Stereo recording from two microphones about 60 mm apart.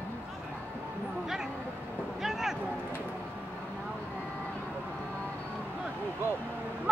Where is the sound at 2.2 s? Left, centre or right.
Centre.